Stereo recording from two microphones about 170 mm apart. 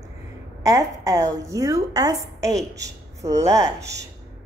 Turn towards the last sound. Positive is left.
turn(degrees=-20)  # may be behind; listen again after turning